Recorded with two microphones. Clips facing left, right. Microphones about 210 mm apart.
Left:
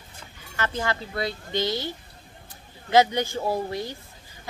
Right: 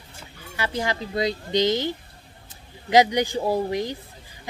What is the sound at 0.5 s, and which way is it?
Speech, 15° right (ahead or behind).